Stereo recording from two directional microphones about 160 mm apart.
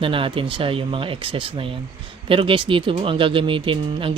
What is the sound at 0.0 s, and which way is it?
Speech, 35° right (ahead or behind).